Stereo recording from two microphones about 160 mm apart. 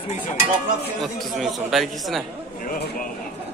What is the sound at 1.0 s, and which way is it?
Speech, centre (ahead or behind).